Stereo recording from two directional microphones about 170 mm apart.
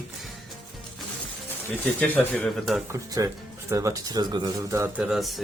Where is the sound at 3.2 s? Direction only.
20° right (ahead or behind).